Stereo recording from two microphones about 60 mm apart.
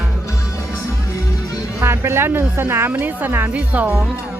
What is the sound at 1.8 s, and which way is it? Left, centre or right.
A woman's voice, right.